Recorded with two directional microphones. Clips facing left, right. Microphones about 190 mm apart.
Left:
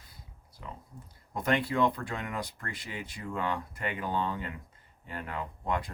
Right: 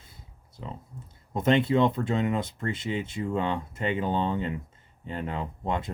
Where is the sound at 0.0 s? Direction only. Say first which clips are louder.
Right 2 dB; 25° right (ahead or behind).